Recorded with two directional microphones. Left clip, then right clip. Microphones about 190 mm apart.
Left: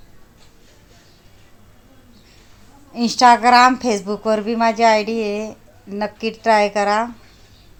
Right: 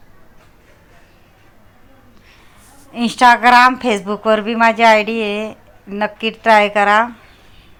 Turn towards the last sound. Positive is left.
turn(degrees=-10)  # may be behind; listen again after turning